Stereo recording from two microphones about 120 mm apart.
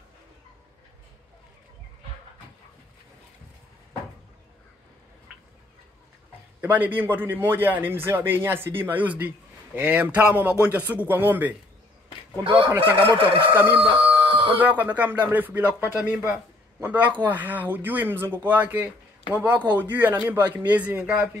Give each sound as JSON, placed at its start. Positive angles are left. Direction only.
{"t": 6.6, "sound": "a man's voice", "side_deg": -15}
{"t": 12.5, "sound": "a man's voice", "side_deg": -15}
{"t": 13.1, "sound": "speech", "side_deg": -45}
{"t": 13.7, "sound": "chicken", "side_deg": -50}
{"t": 14.6, "sound": "a man's voice", "side_deg": -15}